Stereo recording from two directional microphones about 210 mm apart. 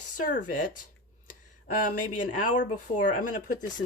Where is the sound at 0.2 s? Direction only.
40° left (ahead or behind).